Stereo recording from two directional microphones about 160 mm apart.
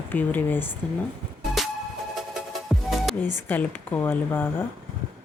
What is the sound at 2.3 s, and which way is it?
Music, centre (ahead or behind).